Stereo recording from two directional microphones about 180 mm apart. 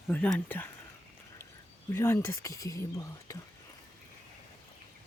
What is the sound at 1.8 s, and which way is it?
Speech, 15° left (ahead or behind).